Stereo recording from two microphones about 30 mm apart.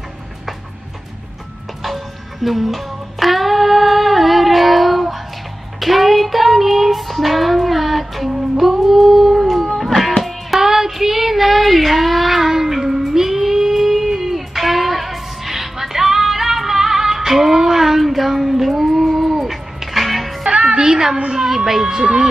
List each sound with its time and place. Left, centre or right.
2.4 s music: centre
5.8 s child singing: centre
8.5 s music: centre
10.6 s child singing: centre
21.3 s a sound: centre